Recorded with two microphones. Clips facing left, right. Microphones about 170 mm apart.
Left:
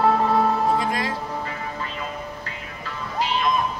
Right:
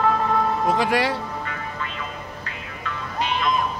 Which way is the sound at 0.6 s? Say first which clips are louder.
Right 2 dB; 80° right.